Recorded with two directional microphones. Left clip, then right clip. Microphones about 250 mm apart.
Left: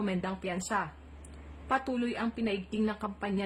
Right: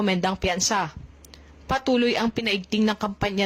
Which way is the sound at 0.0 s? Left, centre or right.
Right.